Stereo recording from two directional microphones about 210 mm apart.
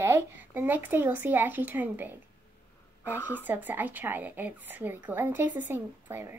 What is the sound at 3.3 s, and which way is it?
A woman's voice, 10° right (ahead or behind).